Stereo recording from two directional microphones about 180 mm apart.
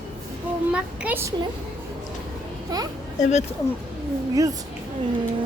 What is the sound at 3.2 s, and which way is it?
Speech, 40° left (ahead or behind).